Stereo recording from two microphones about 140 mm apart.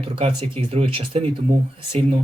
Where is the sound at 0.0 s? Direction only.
40° right (ahead or behind).